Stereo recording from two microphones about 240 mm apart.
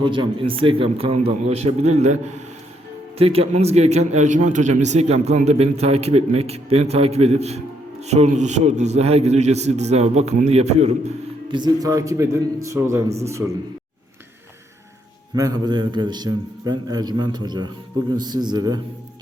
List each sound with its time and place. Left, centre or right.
0.0 s a man's voice: centre
15.4 s a man's voice: centre